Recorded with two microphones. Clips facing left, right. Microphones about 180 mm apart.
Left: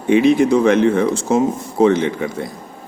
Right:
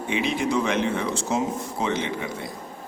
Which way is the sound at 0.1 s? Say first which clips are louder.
Left 12 dB; 45° left (ahead or behind).